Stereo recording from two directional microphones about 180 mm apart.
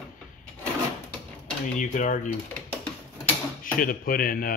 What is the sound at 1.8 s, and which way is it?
Speech, 45° left (ahead or behind).